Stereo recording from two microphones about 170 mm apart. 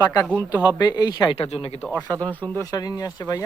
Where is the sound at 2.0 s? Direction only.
10° left (ahead or behind).